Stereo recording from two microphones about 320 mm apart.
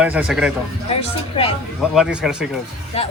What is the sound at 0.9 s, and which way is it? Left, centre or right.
Speech, centre.